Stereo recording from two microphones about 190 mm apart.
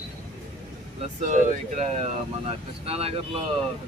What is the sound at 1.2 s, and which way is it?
Speech, 40° right (ahead or behind).